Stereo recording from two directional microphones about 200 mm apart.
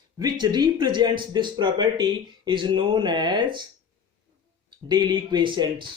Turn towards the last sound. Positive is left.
turn(degrees=-20)  # may be behind; listen again after turning